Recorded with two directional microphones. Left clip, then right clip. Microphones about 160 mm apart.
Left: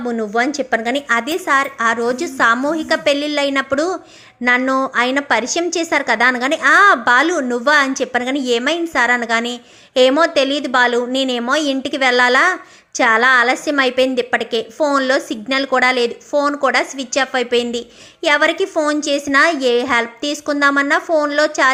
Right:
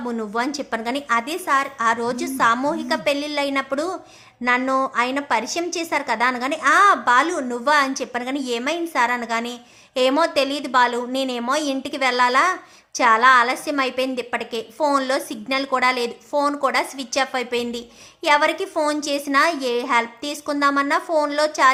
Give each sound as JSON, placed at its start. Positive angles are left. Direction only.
{"t": 0.0, "sound": "a woman's voice", "side_deg": 15}